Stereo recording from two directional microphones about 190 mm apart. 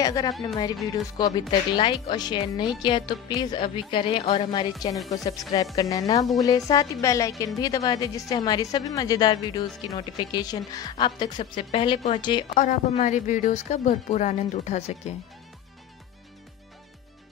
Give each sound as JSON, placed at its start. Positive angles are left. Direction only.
{"t": 0.0, "sound": "a woman's voice", "side_deg": 20}
{"t": 5.8, "sound": "a woman's voice", "side_deg": 20}
{"t": 12.5, "sound": "speech", "side_deg": 40}